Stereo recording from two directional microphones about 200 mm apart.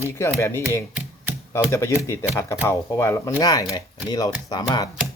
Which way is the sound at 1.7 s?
15° left (ahead or behind).